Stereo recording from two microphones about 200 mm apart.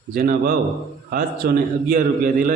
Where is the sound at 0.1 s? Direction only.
45° right (ahead or behind).